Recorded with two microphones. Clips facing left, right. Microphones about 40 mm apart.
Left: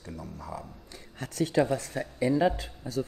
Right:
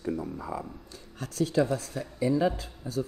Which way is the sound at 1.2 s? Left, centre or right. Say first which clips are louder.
Even; left.